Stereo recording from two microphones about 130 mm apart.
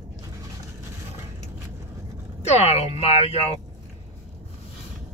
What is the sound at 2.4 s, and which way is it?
Speech, 55° left (ahead or behind).